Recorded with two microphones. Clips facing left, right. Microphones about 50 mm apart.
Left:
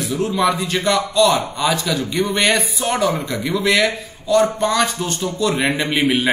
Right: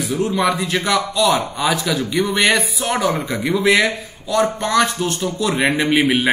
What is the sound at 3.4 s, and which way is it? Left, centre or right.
Speech, centre.